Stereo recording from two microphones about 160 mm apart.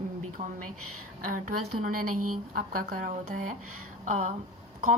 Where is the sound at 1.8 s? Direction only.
60° right (ahead or behind).